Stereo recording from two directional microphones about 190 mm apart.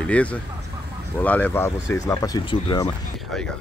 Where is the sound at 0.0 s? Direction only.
5° left (ahead or behind); by 2.9 s 25° left (ahead or behind).